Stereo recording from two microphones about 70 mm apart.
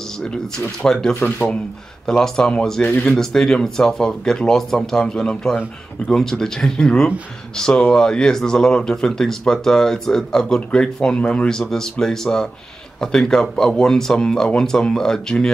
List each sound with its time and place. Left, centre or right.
0.7 s speech: centre
1.2 s speech: left
2.0 s speech: centre